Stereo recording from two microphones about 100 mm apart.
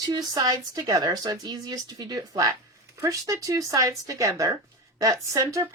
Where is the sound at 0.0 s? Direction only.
45° right (ahead or behind).